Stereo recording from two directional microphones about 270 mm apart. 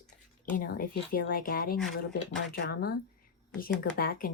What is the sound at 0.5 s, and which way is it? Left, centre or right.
A woman's voice, left.